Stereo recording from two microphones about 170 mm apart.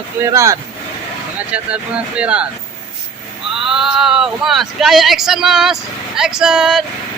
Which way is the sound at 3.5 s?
Centre (ahead or behind).